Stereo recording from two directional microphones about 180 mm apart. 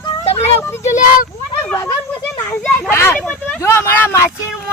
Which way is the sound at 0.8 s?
45° left (ahead or behind).